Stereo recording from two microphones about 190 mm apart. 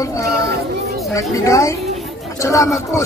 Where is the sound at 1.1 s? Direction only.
15° left (ahead or behind).